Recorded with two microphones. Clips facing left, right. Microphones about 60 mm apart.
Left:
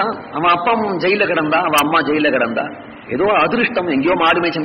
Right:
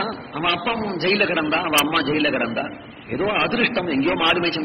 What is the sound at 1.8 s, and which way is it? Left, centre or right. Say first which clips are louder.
A man's voice: left 6 dB; left.